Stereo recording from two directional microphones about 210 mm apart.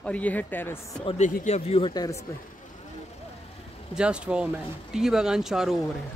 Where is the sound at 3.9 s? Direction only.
5° right (ahead or behind).